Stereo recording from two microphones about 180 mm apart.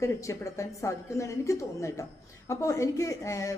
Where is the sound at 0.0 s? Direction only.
15° left (ahead or behind).